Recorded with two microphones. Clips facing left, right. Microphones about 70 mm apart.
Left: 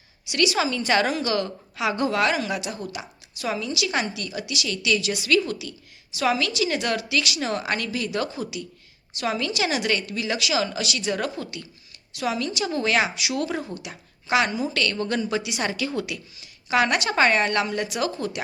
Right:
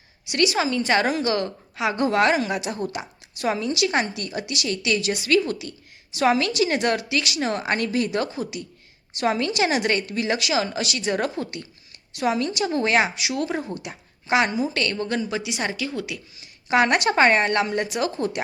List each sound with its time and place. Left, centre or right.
0.3 s a woman's voice: right
13.7 s a woman's voice: right; by 16.3 s centre
16.6 s a woman's voice: right